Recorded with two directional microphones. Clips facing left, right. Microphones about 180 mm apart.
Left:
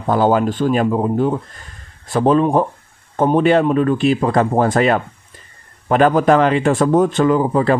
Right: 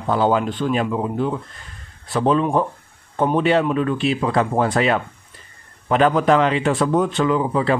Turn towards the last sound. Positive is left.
turn(degrees=45)  # may be behind; listen again after turning